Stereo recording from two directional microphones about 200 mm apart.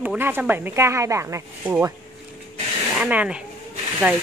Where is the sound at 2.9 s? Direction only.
5° right (ahead or behind).